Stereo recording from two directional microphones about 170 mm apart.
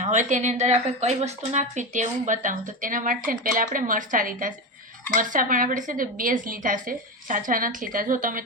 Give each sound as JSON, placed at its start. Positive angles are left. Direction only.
{"t": 0.0, "sound": "speech", "side_deg": -45}